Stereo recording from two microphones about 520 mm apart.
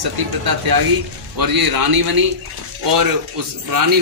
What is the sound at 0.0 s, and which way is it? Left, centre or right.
A man's voice, right.